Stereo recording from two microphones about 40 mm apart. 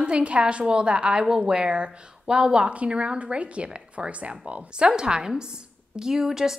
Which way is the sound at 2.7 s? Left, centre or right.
Right.